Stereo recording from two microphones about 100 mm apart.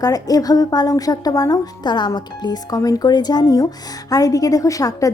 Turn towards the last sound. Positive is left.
turn(degrees=35)  # may be behind; listen again after turning